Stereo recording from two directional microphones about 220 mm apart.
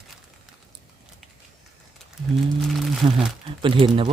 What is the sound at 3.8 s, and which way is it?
Speech, 25° right (ahead or behind).